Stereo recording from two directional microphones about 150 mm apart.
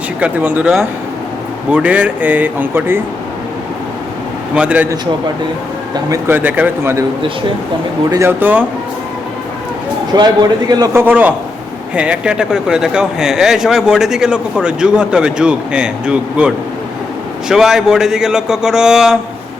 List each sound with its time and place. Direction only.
0.2 s speech: 10° right (ahead or behind)
1.7 s speech: 10° right (ahead or behind)
4.5 s speech: 10° right (ahead or behind)
6.1 s speech: 15° right (ahead or behind)
8.1 s speech: 15° right (ahead or behind)
10.1 s a man's voice: 30° right (ahead or behind)
11.0 s speech: 10° right (ahead or behind)
17.5 s speech: 5° right (ahead or behind)